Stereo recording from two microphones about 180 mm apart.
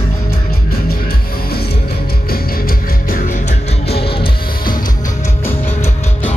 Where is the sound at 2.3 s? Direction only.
55° left (ahead or behind).